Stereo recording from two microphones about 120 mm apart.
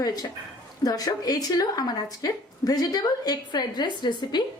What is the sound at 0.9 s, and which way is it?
Speech, 30° left (ahead or behind).